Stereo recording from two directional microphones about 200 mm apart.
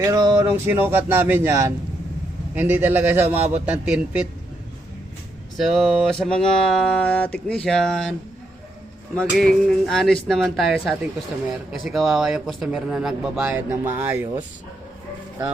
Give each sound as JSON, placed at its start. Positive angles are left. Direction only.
{"t": 0.0, "sound": "a man's voice", "side_deg": -20}
{"t": 5.5, "sound": "speech", "side_deg": 0}
{"t": 9.1, "sound": "speech", "side_deg": 5}